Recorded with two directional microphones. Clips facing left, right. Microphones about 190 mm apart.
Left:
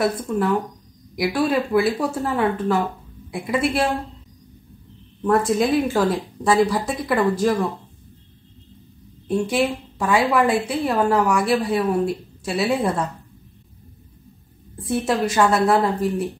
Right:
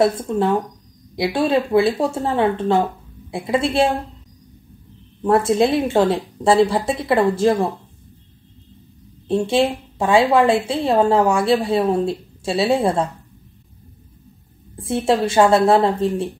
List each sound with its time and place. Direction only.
0.3 s a woman's voice: 25° right (ahead or behind)
5.2 s a woman's voice: 30° right (ahead or behind)
9.3 s a woman's voice: 25° right (ahead or behind)
14.8 s a woman's voice: 25° right (ahead or behind)